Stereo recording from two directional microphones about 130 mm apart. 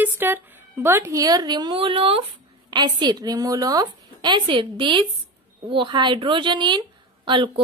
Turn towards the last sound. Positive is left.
turn(degrees=-40)  # may be behind; listen again after turning